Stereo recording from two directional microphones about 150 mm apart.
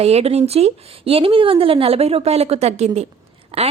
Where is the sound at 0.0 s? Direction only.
45° right (ahead or behind).